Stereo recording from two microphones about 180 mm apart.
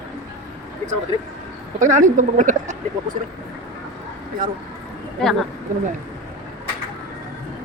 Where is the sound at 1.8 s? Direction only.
45° right (ahead or behind).